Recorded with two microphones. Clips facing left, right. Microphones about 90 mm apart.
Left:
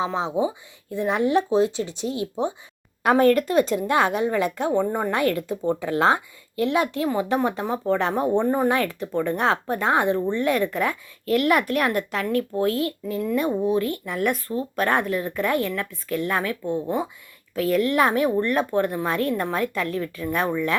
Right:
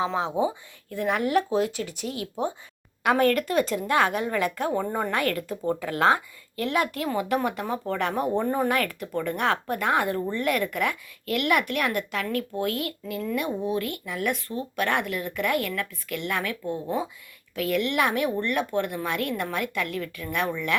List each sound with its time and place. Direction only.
0.0 s speech: 20° left (ahead or behind)
4.8 s a woman's voice: 15° left (ahead or behind)
8.4 s a woman's voice: 10° left (ahead or behind)
8.7 s speech: 25° left (ahead or behind)
14.0 s speech: 45° left (ahead or behind)